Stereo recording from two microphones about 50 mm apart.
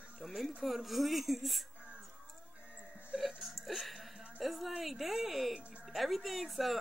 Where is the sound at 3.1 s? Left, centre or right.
Centre.